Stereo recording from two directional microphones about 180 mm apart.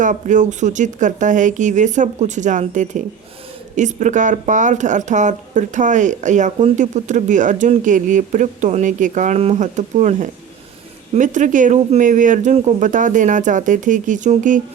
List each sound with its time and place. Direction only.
0.0 s speech: 45° right (ahead or behind)